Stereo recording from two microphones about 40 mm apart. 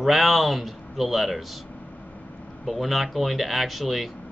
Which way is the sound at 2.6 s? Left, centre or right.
Centre.